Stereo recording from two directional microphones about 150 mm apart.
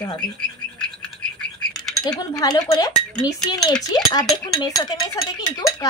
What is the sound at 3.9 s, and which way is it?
Speech, 25° left (ahead or behind).